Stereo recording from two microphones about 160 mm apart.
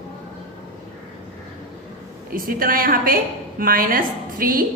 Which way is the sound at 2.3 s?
65° right (ahead or behind).